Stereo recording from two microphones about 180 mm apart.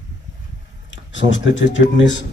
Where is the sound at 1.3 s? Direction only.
90° left.